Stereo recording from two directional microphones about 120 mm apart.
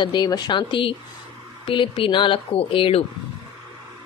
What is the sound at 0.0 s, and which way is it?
Speech, 35° left (ahead or behind).